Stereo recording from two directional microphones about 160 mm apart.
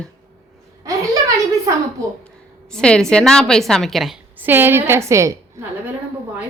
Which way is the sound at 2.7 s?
5° left (ahead or behind).